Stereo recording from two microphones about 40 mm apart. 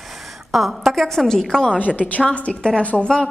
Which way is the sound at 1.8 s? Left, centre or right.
Left.